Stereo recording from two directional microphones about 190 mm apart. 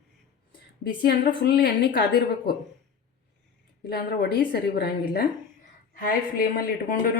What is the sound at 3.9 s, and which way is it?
Speech, 60° left (ahead or behind).